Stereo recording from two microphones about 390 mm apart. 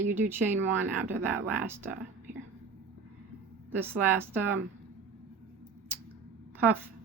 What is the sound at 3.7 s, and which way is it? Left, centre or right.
Speech, centre.